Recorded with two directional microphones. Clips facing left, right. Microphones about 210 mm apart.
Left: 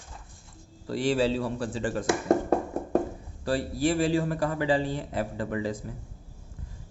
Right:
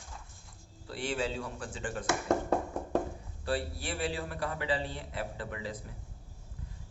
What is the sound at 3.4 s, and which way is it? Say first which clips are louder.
A man's voice: left 8 dB; 40° left (ahead or behind).